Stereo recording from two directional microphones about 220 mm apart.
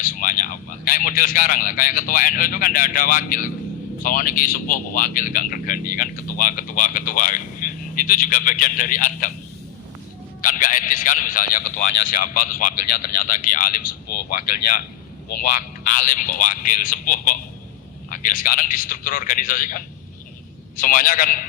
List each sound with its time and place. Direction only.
0.0 s speech: 40° left (ahead or behind)
10.4 s speech: 40° left (ahead or behind)